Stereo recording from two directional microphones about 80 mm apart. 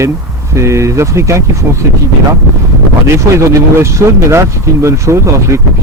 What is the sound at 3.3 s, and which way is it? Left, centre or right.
Speech, right.